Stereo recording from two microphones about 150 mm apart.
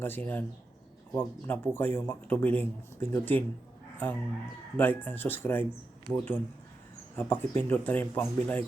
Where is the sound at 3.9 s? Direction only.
10° left (ahead or behind).